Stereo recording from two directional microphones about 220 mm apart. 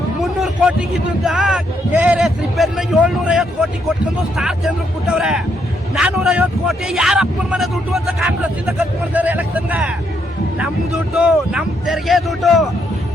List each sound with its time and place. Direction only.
0.2 s a man's voice: centre (ahead or behind)